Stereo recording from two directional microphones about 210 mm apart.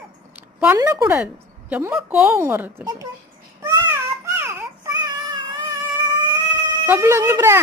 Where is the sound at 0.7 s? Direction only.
15° right (ahead or behind).